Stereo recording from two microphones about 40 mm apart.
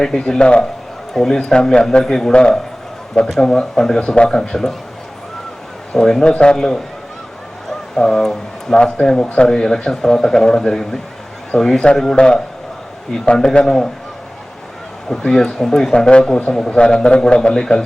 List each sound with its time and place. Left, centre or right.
0.0 s speech: centre
1.1 s a man's voice: centre
3.2 s speech: centre
4.0 s a man's voice: left
4.3 s speech: centre
5.9 s speech: centre
6.2 s a man's voice: left
7.7 s a sound: centre
8.8 s a man's voice: centre
13.7 s speech: centre
15.1 s a man's voice: centre
17.5 s speech: centre